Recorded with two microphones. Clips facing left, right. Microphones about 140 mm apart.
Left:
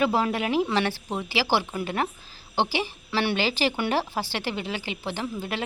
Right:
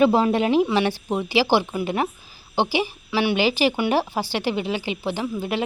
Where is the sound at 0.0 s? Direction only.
20° right (ahead or behind).